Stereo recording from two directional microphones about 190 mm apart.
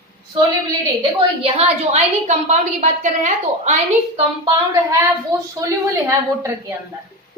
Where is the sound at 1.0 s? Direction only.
30° right (ahead or behind).